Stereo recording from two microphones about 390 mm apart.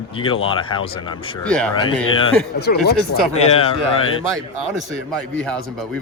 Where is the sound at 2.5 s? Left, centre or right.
Left.